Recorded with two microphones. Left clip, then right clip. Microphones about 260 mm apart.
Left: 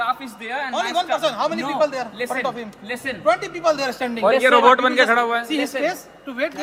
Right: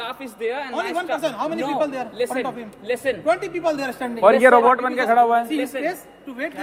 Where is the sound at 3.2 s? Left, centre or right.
Centre.